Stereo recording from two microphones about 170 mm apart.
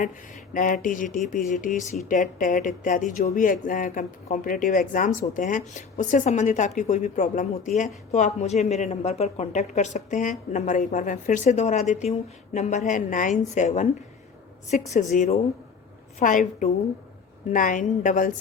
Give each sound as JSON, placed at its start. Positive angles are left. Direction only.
{"t": 0.5, "sound": "speech", "side_deg": 50}